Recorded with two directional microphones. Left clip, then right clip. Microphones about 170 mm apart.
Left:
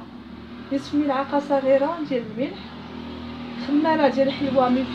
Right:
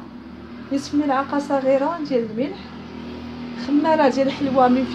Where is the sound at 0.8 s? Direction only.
40° right (ahead or behind).